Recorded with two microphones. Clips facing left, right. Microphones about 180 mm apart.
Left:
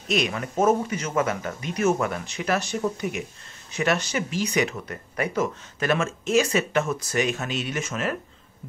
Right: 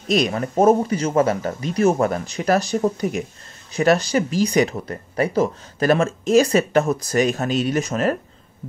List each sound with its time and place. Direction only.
0.1 s speech: 35° right (ahead or behind)